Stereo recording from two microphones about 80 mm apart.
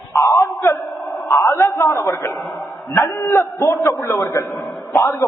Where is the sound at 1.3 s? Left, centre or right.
Left.